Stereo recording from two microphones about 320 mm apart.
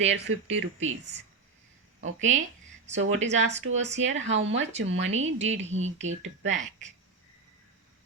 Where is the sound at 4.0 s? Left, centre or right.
Right.